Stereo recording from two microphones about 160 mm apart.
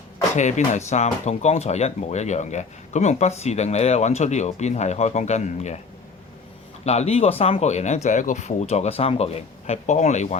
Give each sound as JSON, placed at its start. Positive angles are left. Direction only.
{"t": 0.3, "sound": "speech", "side_deg": 50}
{"t": 6.8, "sound": "speech", "side_deg": 40}